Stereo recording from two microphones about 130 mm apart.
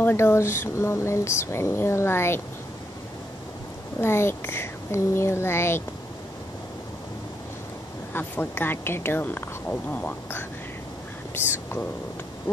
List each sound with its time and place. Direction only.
0.0 s speech: 20° left (ahead or behind)
4.0 s speech: 20° left (ahead or behind)
8.1 s speech: 15° left (ahead or behind)